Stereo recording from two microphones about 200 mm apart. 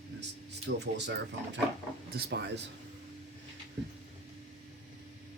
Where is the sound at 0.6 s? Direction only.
60° right (ahead or behind).